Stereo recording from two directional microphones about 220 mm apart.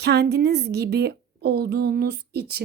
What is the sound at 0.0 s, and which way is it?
A woman's voice, 50° right (ahead or behind).